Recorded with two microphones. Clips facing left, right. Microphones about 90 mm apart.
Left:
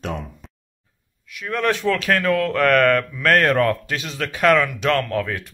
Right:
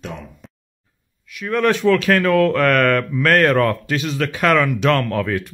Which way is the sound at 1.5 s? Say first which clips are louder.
Right 5 dB; 5° right (ahead or behind).